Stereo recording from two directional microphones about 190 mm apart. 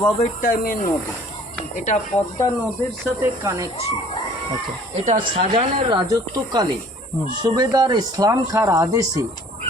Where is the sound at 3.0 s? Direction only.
15° right (ahead or behind).